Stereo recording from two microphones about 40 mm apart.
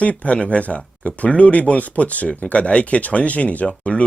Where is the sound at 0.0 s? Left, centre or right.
Left.